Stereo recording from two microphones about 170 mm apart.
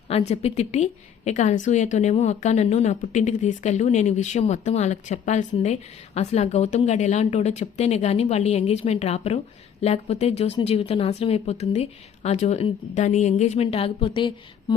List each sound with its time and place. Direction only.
0.1 s a woman's voice: 40° left (ahead or behind)